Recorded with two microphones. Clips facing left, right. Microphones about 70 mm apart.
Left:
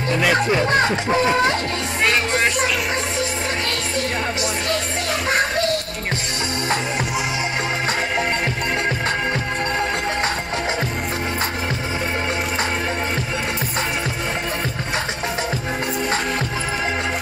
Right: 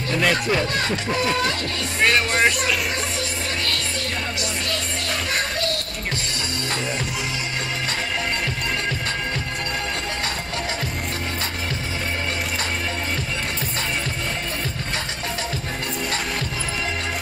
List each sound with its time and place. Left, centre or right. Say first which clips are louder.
0.3 s speech: left 5 dB; centre
0.7 s speech: left 6 dB; left